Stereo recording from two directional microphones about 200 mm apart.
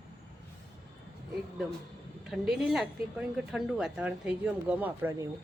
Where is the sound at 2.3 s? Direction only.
Centre (ahead or behind).